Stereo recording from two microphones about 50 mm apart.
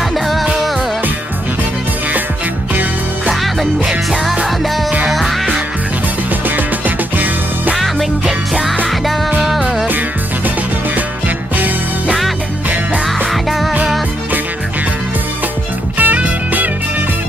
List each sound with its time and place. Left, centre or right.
0.1 s music: centre
4.1 s music: centre
7.7 s music: centre
9.4 s music: centre
11.0 s music: right
13.3 s music: centre
16.0 s music: right